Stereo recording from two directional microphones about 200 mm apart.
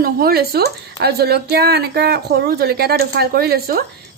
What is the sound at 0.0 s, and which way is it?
Speech, 50° right (ahead or behind).